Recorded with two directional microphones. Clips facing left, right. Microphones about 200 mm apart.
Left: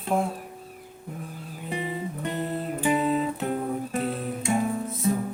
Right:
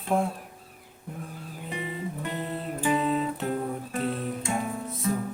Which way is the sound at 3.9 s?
35° left (ahead or behind).